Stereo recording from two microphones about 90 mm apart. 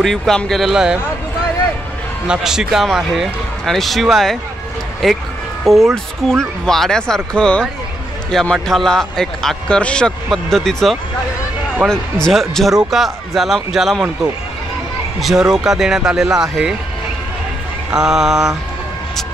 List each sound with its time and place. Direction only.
0.0 s a man's voice: 5° left (ahead or behind)
2.2 s a man's voice: 10° right (ahead or behind)
15.1 s a man's voice: 5° right (ahead or behind)
17.9 s a man's voice: 5° right (ahead or behind)